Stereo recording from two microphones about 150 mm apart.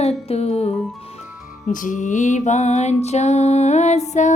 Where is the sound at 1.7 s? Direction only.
60° left (ahead or behind).